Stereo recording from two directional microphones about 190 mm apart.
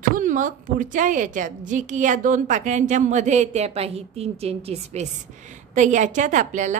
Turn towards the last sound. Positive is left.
turn(degrees=-40)  # may be behind; listen again after turning